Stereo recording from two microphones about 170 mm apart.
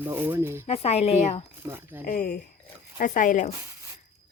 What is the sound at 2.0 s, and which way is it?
Speech, 55° left (ahead or behind).